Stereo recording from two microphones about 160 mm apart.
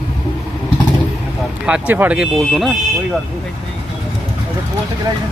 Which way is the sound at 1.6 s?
10° right (ahead or behind).